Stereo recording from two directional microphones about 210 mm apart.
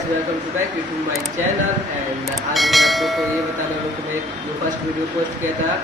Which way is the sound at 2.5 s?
Centre (ahead or behind).